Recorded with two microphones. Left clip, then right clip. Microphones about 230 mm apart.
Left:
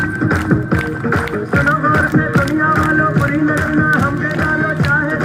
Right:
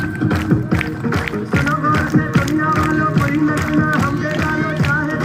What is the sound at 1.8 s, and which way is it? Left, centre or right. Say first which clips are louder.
Music: left 3 dB; right.